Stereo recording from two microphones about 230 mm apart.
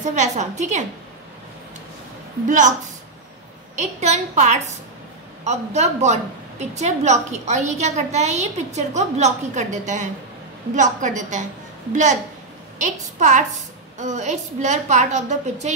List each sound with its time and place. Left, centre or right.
0.0 s a woman's voice: right
2.4 s a woman's voice: right
3.7 s a woman's voice: right